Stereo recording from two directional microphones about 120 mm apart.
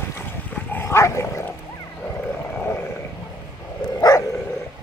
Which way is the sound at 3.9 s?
25° left (ahead or behind).